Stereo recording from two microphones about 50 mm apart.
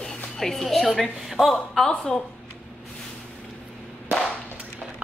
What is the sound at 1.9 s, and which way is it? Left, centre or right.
Speech, centre.